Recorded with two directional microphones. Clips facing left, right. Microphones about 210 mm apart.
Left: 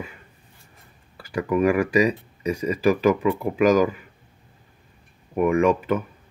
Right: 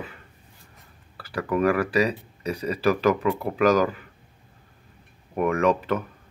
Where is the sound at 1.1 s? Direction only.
15° left (ahead or behind).